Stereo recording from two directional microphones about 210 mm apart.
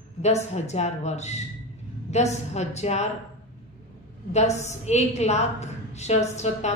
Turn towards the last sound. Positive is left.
turn(degrees=30)  # may be behind; listen again after turning